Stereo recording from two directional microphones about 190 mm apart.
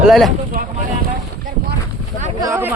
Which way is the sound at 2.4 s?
15° right (ahead or behind).